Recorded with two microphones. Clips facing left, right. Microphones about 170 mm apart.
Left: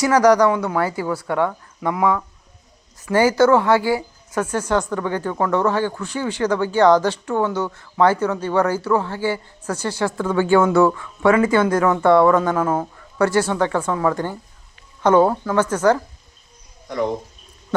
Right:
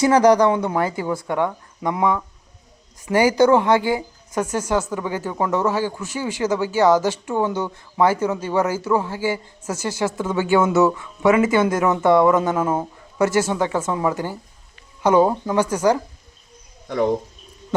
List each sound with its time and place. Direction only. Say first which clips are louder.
0.0 s speech: even; 25° right (ahead or behind); by 10.2 s 10° right (ahead or behind)
10.2 s speech: left 3 dB; 20° right (ahead or behind)
12.7 s speech: left 1 dB; 10° right (ahead or behind)